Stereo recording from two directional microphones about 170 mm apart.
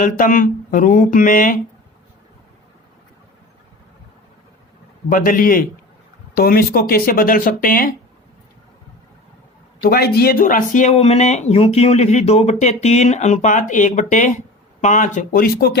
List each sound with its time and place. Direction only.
0.0 s speech: 50° left (ahead or behind)
5.0 s speech: 50° left (ahead or behind)
9.8 s speech: 65° left (ahead or behind)